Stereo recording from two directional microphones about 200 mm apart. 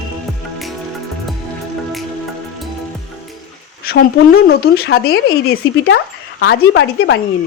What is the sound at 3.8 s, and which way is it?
Speech, 50° left (ahead or behind).